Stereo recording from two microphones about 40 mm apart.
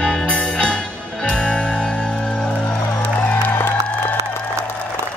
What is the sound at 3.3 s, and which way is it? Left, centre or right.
Music, left.